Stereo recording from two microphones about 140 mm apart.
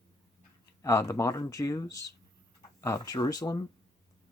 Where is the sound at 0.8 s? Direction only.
20° left (ahead or behind).